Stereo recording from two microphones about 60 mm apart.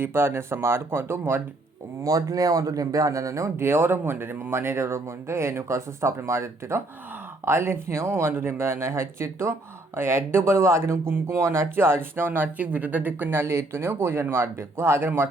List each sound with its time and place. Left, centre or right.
0.0 s speech: right
2.0 s speech: right
13.4 s speech: right